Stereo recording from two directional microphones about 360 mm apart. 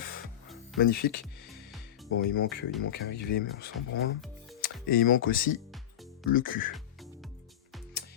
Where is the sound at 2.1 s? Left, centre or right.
Left.